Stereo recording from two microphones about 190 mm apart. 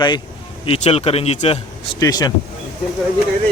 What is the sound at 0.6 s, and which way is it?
A man's voice, 30° left (ahead or behind).